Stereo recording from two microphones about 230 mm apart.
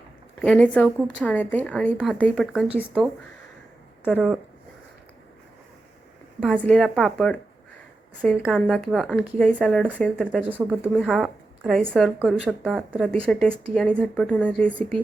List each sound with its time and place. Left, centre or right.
0.3 s speech: centre
4.1 s speech: centre
6.4 s speech: centre
8.4 s speech: centre
10.4 s speech: centre